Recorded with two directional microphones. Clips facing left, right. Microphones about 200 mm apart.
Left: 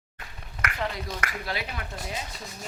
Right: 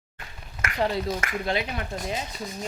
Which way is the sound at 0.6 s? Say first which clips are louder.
Right 6 dB; 25° right (ahead or behind).